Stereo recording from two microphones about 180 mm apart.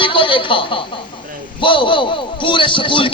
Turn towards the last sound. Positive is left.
turn(degrees=30)  # may be behind; listen again after turning